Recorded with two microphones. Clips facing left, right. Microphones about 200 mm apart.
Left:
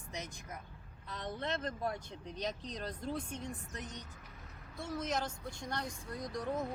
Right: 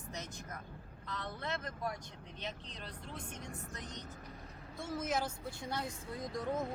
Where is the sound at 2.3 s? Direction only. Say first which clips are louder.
Left 6 dB; 40° left (ahead or behind).